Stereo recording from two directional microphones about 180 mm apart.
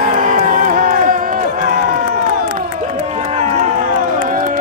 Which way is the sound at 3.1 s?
35° right (ahead or behind).